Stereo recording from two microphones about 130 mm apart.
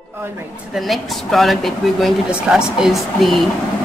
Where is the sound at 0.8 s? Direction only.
Centre (ahead or behind).